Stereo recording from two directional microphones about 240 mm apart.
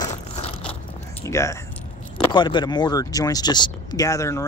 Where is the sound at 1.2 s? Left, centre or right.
Centre.